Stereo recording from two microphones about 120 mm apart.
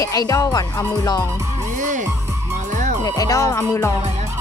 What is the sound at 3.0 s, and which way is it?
Speech, 30° left (ahead or behind).